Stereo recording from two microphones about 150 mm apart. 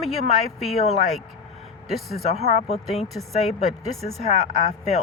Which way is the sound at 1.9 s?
Centre (ahead or behind).